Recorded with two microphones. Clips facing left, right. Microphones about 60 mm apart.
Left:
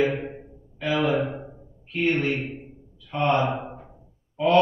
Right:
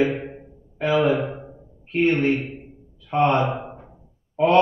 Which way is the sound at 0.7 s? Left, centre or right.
Right.